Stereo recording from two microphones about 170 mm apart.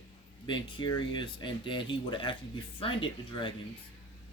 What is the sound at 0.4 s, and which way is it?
Speech, 25° left (ahead or behind).